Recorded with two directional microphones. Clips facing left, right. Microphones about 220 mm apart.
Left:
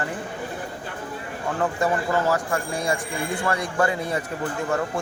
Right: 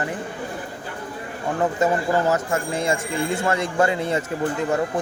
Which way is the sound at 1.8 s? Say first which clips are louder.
Right 2 dB; 20° right (ahead or behind).